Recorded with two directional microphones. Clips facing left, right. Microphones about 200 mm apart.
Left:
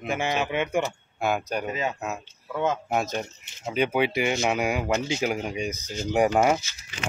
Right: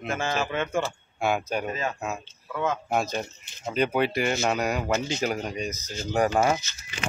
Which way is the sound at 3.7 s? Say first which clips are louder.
Even; 5° left (ahead or behind).